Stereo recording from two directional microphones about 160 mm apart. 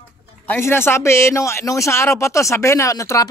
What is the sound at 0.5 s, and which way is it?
Speech, 15° left (ahead or behind).